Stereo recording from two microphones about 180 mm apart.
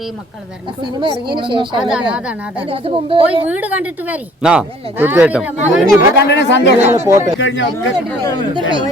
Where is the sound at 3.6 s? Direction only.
10° right (ahead or behind).